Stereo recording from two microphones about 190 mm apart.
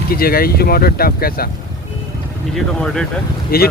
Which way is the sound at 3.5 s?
50° left (ahead or behind).